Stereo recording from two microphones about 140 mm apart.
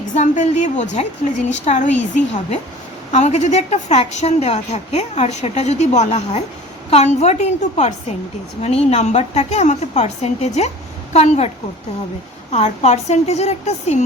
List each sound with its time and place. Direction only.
0.1 s a woman's voice: 60° left (ahead or behind)
3.1 s a woman's voice: 55° left (ahead or behind)